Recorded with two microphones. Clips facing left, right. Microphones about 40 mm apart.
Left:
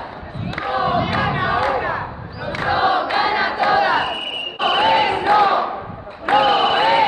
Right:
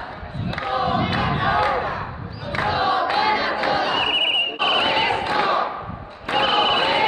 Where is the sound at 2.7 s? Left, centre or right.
Left.